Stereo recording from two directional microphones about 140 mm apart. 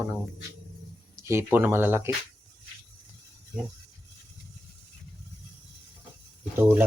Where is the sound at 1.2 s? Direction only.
20° right (ahead or behind).